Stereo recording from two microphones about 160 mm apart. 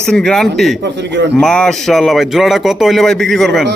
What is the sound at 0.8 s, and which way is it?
Speech, 90° right.